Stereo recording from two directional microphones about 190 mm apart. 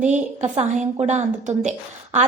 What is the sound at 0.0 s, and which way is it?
A woman's voice, 40° right (ahead or behind).